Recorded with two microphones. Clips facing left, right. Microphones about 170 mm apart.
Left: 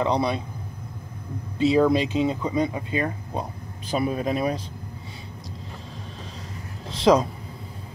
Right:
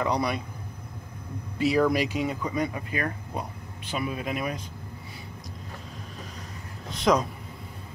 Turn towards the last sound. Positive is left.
turn(degrees=30)  # may be behind; listen again after turning